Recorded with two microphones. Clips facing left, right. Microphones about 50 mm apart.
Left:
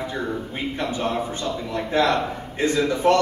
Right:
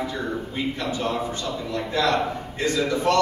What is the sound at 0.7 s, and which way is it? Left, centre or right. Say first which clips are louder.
A man's voice: left 4 dB; left.